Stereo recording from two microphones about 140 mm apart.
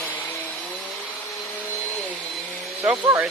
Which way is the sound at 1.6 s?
10° left (ahead or behind).